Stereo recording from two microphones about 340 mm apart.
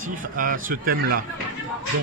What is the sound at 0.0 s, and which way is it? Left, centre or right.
Speech, right.